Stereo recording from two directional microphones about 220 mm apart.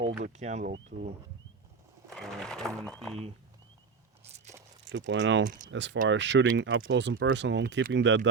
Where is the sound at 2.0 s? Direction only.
Centre (ahead or behind).